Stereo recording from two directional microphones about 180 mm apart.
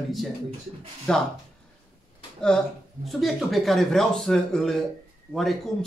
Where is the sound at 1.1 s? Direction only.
5° left (ahead or behind).